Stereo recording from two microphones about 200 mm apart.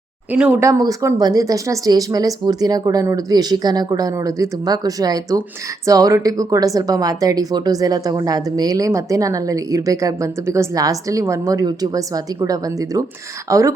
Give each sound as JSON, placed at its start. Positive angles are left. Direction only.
{"t": 0.3, "sound": "speech", "side_deg": -10}